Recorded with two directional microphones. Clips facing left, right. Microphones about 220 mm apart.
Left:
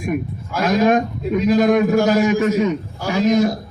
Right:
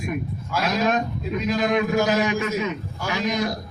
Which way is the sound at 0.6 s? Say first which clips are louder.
Left 7 dB; 50° left (ahead or behind).